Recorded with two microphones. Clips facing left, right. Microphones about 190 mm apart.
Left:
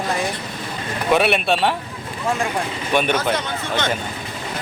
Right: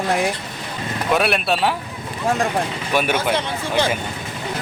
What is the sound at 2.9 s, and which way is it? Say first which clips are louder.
Speech: left 1 dB; 5° right (ahead or behind).